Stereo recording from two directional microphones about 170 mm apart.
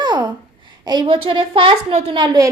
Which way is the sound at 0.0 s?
25° right (ahead or behind).